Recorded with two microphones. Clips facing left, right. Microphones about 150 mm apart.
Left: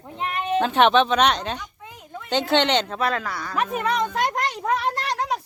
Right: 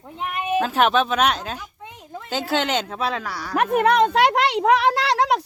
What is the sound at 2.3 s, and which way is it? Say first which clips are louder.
Speech: left 3 dB; 5° right (ahead or behind).